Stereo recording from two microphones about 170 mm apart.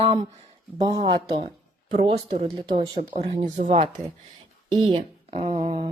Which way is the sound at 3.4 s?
50° right (ahead or behind).